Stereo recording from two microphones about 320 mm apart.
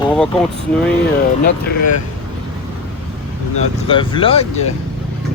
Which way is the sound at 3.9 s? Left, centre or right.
Centre.